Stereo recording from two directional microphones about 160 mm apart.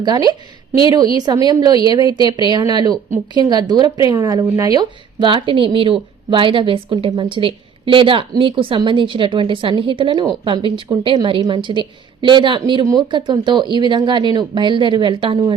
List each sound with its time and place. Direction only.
0.0 s a woman's voice: 25° right (ahead or behind)